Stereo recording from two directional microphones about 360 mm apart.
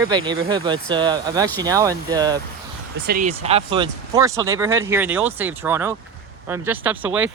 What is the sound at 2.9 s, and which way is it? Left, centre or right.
Speech, right.